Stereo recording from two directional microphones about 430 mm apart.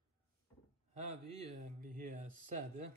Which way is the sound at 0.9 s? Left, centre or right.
Centre.